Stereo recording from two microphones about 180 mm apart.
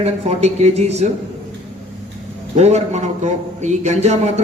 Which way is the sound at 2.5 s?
40° right (ahead or behind).